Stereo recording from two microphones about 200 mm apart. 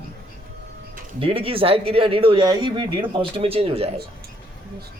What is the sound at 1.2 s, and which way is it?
Speech, 25° right (ahead or behind).